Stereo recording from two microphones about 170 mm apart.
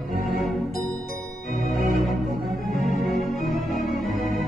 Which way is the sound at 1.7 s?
Centre (ahead or behind).